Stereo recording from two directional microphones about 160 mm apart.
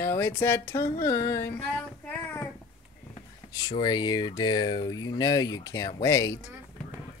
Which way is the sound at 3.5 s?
25° left (ahead or behind).